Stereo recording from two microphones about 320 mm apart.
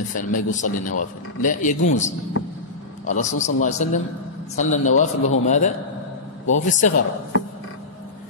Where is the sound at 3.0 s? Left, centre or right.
Left.